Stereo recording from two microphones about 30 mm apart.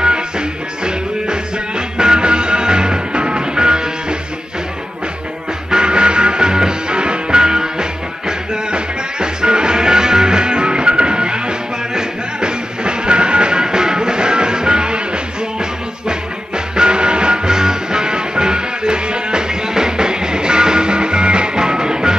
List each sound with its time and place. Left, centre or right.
0.0 s music: right
5.7 s music: right
16.1 s music: right